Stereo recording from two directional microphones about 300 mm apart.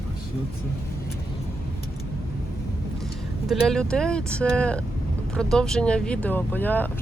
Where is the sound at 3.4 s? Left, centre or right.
Centre.